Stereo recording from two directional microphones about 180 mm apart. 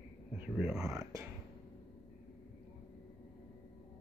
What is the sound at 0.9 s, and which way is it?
Speech, 20° right (ahead or behind).